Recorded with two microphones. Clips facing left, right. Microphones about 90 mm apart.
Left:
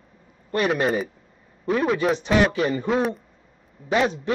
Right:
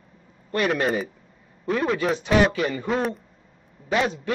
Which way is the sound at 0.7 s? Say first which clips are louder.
Left 1 dB; centre (ahead or behind).